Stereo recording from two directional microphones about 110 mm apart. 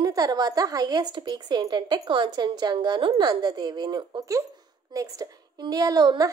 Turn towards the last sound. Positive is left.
turn(degrees=-40)  # may be behind; listen again after turning